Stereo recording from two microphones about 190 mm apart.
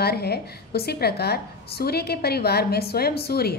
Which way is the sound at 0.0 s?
55° left (ahead or behind).